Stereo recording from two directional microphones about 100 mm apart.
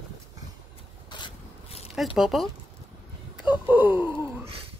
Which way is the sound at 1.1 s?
45° left (ahead or behind).